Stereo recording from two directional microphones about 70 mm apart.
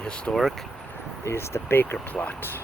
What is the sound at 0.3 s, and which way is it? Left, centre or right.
Speech, centre.